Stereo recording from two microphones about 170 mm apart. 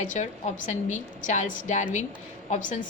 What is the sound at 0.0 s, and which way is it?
A woman's voice, 45° left (ahead or behind).